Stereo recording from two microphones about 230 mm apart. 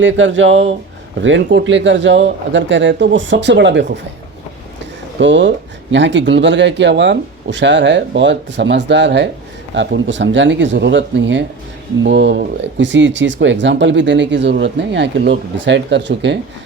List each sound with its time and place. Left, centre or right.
0.0 s speech: right
5.2 s speech: right